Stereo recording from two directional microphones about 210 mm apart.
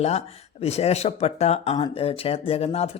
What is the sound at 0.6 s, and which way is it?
Speech, 30° left (ahead or behind).